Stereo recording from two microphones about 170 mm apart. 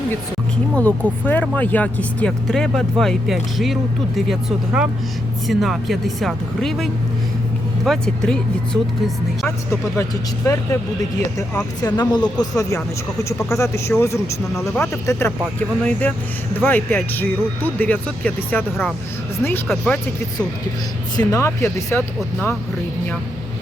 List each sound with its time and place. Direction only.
0.8 s speech: 10° left (ahead or behind)
10.0 s speech: 15° left (ahead or behind)
21.2 s speech: 20° left (ahead or behind)